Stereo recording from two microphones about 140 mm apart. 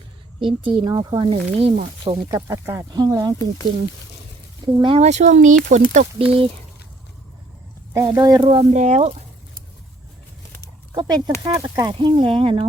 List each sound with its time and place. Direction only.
0.3 s a woman's voice: 40° right (ahead or behind)
1.3 s speech: 45° right (ahead or behind)
1.8 s speech: 65° right (ahead or behind)
2.3 s speech: 20° right (ahead or behind)
4.6 s speech: 35° right (ahead or behind)
4.9 s speech: 55° right (ahead or behind)
7.9 s speech: 25° right (ahead or behind)
8.7 s speech: 55° right (ahead or behind)
11.0 s speech: 30° right (ahead or behind)
11.9 s speech: 35° right (ahead or behind)